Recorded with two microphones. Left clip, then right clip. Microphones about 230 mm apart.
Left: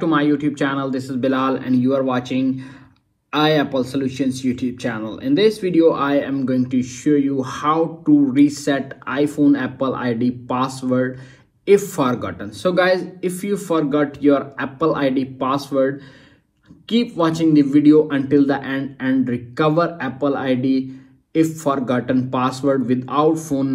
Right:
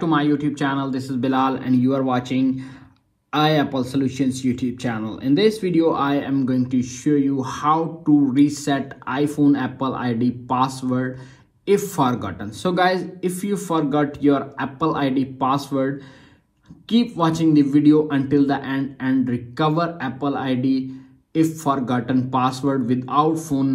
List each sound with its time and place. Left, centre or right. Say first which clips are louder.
0.0 s a man's voice: left 2 dB; right
17.2 s a man's voice: left 2 dB; right